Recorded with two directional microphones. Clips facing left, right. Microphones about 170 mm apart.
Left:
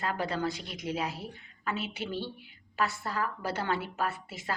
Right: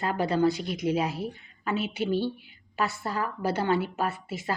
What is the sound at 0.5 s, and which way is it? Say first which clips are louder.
A woman's voice: right 8 dB; 10° right (ahead or behind).